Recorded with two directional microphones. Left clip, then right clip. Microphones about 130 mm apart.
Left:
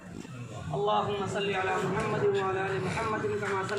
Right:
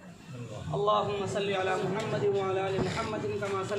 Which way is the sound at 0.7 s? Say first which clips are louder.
Right 1 dB; 30° right (ahead or behind).